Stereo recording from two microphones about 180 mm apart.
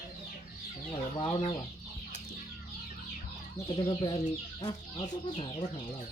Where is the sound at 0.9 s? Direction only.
25° left (ahead or behind).